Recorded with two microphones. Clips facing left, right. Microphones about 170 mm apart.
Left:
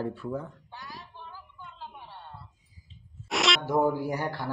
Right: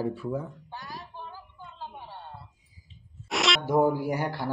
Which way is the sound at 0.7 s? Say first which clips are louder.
Right 4 dB; 40° right (ahead or behind).